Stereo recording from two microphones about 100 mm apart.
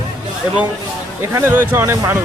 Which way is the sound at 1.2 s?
25° right (ahead or behind).